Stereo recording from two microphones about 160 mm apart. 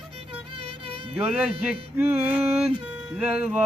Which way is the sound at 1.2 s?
10° right (ahead or behind).